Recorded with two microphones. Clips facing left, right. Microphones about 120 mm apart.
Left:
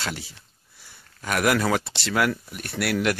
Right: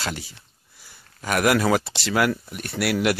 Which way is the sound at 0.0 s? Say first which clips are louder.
Right 2 dB; centre (ahead or behind).